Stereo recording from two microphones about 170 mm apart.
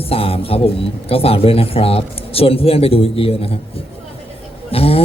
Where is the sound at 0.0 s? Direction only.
35° left (ahead or behind).